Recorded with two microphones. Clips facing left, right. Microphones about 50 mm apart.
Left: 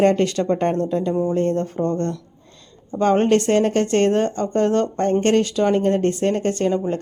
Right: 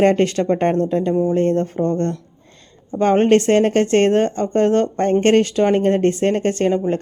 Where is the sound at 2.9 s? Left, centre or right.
Right.